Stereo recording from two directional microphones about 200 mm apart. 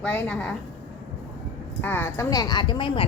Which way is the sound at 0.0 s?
5° left (ahead or behind).